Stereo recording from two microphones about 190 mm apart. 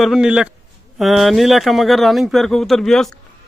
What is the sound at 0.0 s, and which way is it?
Speech, 5° right (ahead or behind).